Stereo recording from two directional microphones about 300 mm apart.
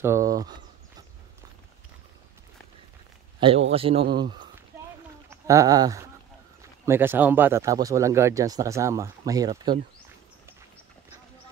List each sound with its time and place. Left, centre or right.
0.0 s speech: centre
3.3 s a man's voice: centre